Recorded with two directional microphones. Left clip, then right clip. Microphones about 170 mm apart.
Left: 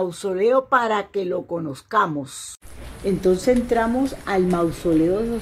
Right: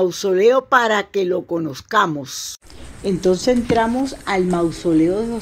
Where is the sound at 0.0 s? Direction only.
25° right (ahead or behind).